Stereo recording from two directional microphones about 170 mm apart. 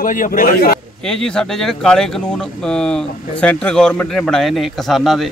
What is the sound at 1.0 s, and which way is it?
A man's voice, 5° left (ahead or behind).